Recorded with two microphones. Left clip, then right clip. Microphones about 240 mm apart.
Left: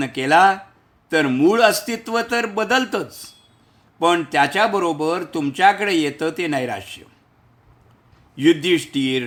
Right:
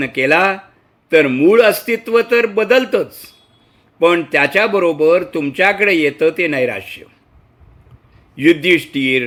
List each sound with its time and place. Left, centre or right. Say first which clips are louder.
0.0 s speech: right 1 dB; centre
8.4 s speech: right 5 dB; centre